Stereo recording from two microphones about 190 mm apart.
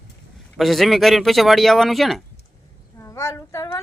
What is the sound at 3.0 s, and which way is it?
Child singing, 15° left (ahead or behind).